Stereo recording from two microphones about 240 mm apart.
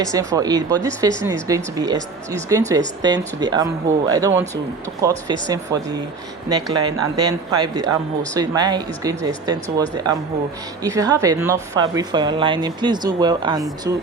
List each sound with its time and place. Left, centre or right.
0.0 s speech: centre